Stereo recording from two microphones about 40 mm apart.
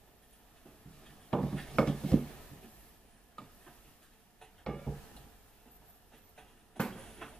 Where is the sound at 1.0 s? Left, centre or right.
Centre.